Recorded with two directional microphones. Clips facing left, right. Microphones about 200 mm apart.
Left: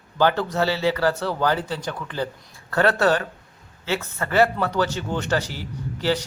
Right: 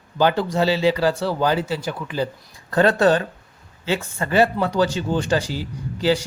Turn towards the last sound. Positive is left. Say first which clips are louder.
# right 3 dB
turn(degrees=-10)  # may be behind; listen again after turning